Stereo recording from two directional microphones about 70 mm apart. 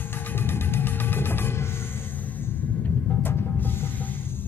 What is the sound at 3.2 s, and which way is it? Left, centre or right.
Music, left.